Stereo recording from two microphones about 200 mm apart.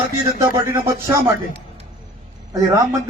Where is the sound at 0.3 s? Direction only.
15° right (ahead or behind).